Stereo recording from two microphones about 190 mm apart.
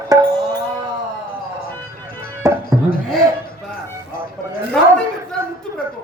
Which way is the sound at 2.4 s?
15° right (ahead or behind).